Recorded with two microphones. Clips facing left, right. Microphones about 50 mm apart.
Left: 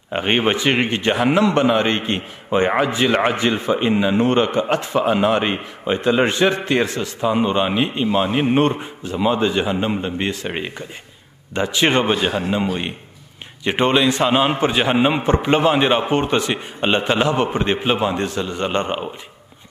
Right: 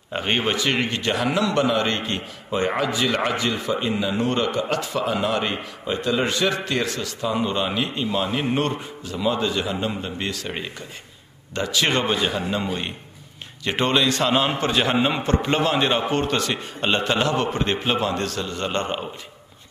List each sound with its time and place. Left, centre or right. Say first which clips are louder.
0.1 s a man's voice: left 5 dB; left
13.7 s a man's voice: left 4 dB; centre